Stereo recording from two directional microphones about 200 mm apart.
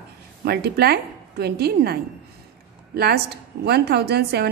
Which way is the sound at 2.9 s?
55° right (ahead or behind).